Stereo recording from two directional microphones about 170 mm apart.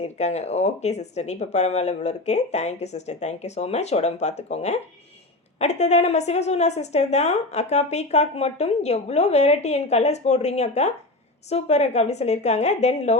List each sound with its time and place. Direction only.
0.0 s a woman's voice: 40° left (ahead or behind)